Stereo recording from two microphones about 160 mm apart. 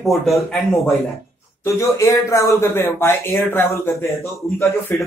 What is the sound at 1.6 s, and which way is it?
Speech, 15° left (ahead or behind).